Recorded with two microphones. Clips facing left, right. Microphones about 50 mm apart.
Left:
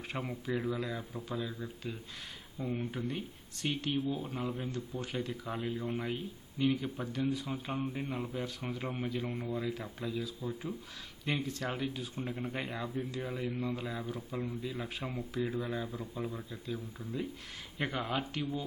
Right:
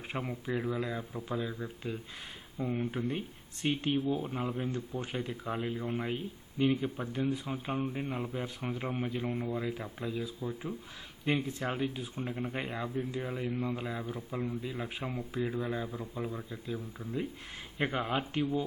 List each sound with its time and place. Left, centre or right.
0.1 s a man's voice: centre
9.6 s a man's voice: right
14.2 s a man's voice: centre
17.7 s a man's voice: right